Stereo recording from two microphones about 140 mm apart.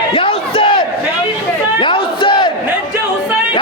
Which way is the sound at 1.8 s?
35° left (ahead or behind).